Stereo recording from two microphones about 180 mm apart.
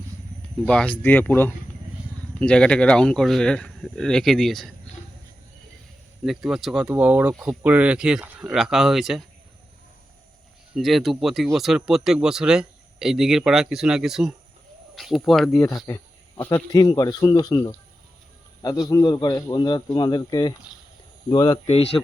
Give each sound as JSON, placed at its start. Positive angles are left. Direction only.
{"t": 1.0, "sound": "a man's voice", "side_deg": 10}
{"t": 6.2, "sound": "a man's voice", "side_deg": 0}
{"t": 10.8, "sound": "a man's voice", "side_deg": 0}
{"t": 15.9, "sound": "a man's voice", "side_deg": 15}